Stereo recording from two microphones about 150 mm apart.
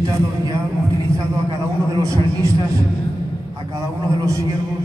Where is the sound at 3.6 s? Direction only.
20° right (ahead or behind).